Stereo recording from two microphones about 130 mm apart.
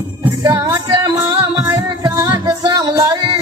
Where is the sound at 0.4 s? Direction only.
20° right (ahead or behind).